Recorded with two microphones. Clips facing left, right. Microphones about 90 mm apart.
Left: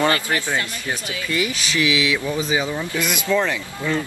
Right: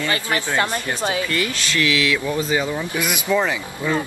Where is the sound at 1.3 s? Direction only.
10° left (ahead or behind).